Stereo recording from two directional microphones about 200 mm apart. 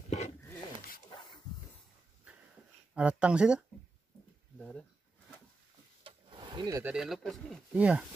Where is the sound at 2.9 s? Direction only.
5° right (ahead or behind).